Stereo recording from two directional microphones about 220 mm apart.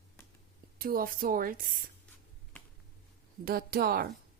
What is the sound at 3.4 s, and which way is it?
Speech, 45° right (ahead or behind).